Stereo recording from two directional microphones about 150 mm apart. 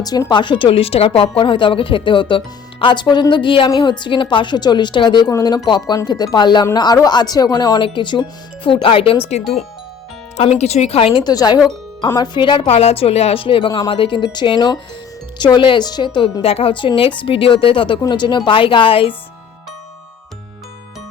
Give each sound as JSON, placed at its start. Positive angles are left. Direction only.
{"t": 0.0, "sound": "speech", "side_deg": 25}